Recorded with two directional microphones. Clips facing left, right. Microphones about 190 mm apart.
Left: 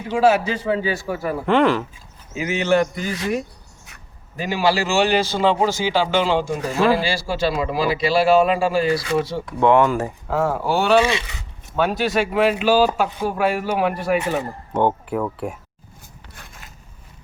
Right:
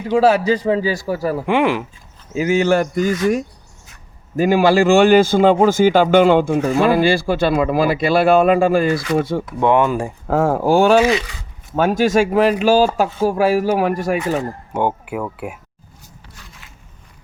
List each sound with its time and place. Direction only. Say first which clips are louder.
0.2 s a man's voice: right 2 dB; 35° right (ahead or behind)
1.5 s speech: left 1 dB; 15° right (ahead or behind)
2.3 s speech: right 4 dB; 40° right (ahead or behind)
9.6 s speech: even; 15° right (ahead or behind)
10.2 s speech: right 6 dB; 45° right (ahead or behind)
14.7 s speech: left 2 dB; 10° right (ahead or behind)
16.3 s scrape: left 3 dB; 50° left (ahead or behind)